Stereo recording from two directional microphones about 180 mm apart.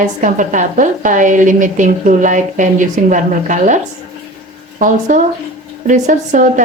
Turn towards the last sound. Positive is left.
turn(degrees=-45)  # may be behind; listen again after turning